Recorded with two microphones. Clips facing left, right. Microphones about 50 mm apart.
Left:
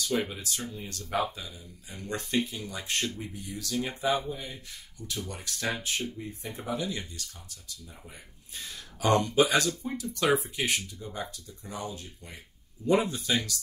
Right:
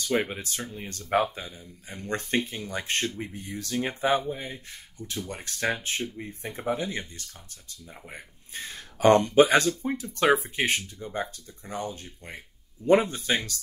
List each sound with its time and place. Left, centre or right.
0.0 s speech: right